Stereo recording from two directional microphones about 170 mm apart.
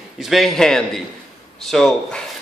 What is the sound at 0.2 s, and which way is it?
A man's voice, centre (ahead or behind).